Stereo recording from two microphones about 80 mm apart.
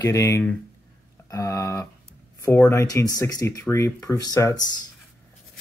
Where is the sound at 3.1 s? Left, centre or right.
Left.